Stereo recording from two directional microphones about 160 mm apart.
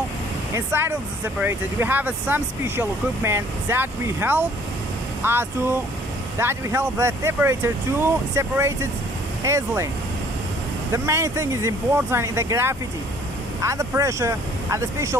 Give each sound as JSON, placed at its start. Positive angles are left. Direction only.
{"t": 0.6, "sound": "speech", "side_deg": -15}
{"t": 10.9, "sound": "speech", "side_deg": -20}